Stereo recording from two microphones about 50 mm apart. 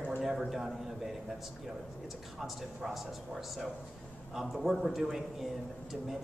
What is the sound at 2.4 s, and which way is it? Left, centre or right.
A man's voice, centre.